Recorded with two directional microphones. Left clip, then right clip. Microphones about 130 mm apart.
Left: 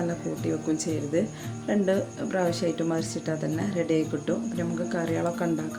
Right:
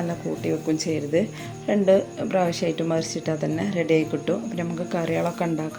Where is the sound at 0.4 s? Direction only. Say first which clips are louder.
Right 4 dB; 10° right (ahead or behind).